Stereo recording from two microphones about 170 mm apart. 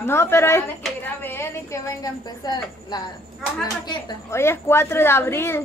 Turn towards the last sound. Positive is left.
turn(degrees=15)  # may be behind; listen again after turning